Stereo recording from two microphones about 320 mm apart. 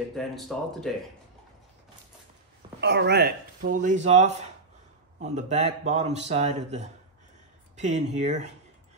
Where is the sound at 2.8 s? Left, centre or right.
Right.